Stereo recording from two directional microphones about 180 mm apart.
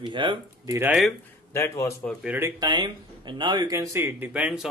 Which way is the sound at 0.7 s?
5° right (ahead or behind).